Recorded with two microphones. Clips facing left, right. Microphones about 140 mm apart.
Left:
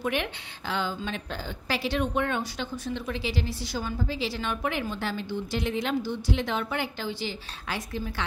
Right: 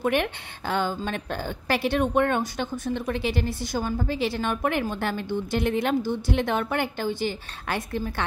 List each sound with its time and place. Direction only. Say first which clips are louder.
0.0 s a woman's voice: right 5 dB; 50° right (ahead or behind)